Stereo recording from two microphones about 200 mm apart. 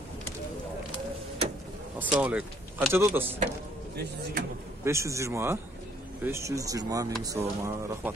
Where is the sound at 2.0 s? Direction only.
5° right (ahead or behind).